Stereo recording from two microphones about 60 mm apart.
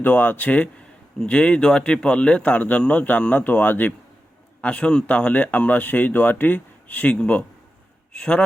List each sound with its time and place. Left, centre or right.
0.0 s speech: left
4.6 s speech: centre